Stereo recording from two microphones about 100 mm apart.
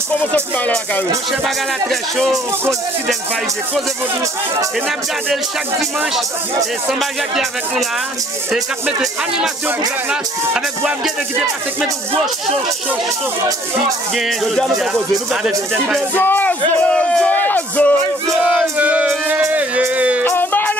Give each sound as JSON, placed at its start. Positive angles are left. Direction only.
{"t": 0.2, "sound": "speech", "side_deg": 15}
{"t": 1.4, "sound": "music", "side_deg": 0}
{"t": 6.9, "sound": "music", "side_deg": -5}
{"t": 14.1, "sound": "music", "side_deg": 0}
{"t": 16.2, "sound": "speech", "side_deg": 20}
{"t": 18.4, "sound": "music", "side_deg": -10}
{"t": 19.8, "sound": "a sound", "side_deg": -15}
{"t": 20.2, "sound": "music", "side_deg": 20}